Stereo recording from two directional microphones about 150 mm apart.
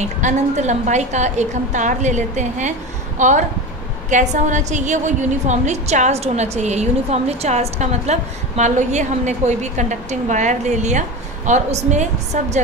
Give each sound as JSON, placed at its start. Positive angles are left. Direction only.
{"t": 0.2, "sound": "a woman's voice", "side_deg": -55}